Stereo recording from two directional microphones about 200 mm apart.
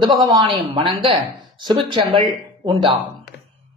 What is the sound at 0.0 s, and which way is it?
A man's voice, 20° right (ahead or behind).